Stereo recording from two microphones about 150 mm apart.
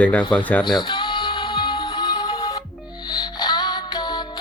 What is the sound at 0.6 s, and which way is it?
Music, 30° left (ahead or behind).